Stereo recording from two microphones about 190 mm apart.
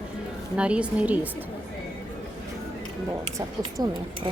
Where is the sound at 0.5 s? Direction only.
5° right (ahead or behind).